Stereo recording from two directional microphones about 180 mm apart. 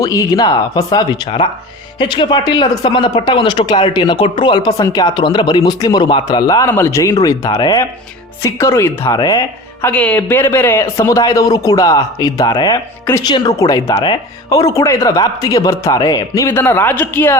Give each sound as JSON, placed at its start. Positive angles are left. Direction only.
{"t": 0.0, "sound": "speech", "side_deg": 20}
{"t": 9.8, "sound": "speech", "side_deg": 10}